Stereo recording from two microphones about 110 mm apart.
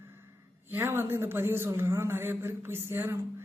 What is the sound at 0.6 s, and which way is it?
Speech, 20° right (ahead or behind).